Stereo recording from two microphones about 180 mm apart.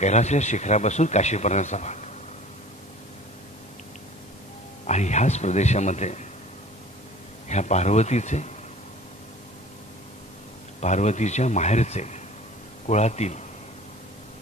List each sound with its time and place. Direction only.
0.0 s speech: 40° left (ahead or behind)
4.8 s speech: 40° left (ahead or behind)
7.4 s speech: 40° left (ahead or behind)
10.8 s speech: 40° left (ahead or behind)